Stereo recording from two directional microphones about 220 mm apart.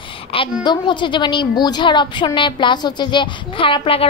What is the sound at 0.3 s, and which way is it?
A woman's voice, 20° left (ahead or behind).